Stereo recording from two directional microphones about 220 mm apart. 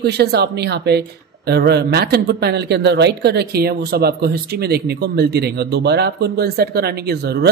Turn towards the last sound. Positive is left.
turn(degrees=-45)  # may be behind; listen again after turning